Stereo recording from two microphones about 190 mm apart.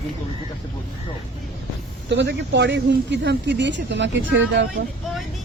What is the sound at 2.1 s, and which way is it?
Speech, 70° right (ahead or behind).